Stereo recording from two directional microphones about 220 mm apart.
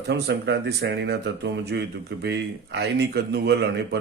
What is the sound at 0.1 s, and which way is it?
Speech, 50° right (ahead or behind).